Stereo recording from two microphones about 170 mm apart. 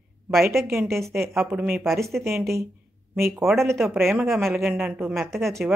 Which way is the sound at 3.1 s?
15° right (ahead or behind).